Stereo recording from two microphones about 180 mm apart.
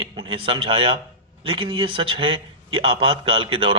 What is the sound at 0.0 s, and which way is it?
Speech, 30° right (ahead or behind).